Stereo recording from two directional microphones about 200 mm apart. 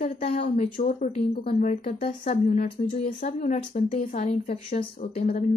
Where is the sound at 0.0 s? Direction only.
30° left (ahead or behind).